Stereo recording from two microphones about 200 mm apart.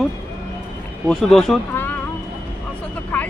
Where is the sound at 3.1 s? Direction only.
10° left (ahead or behind).